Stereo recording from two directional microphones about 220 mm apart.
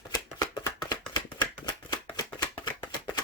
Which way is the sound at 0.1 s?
15° left (ahead or behind).